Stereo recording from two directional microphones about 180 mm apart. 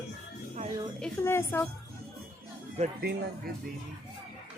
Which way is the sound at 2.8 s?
35° right (ahead or behind).